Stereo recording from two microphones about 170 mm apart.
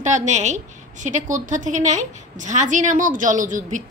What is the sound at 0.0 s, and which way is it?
A woman's voice, 45° right (ahead or behind).